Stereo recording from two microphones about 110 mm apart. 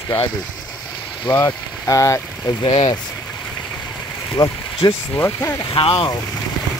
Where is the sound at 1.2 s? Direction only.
20° left (ahead or behind).